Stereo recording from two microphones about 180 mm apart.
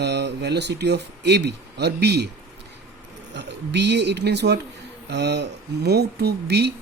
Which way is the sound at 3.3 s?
70° right (ahead or behind).